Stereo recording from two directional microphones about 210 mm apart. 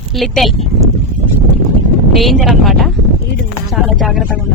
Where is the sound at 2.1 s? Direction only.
Centre (ahead or behind).